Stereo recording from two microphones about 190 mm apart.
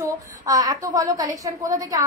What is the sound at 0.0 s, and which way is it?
A woman's voice, 20° right (ahead or behind).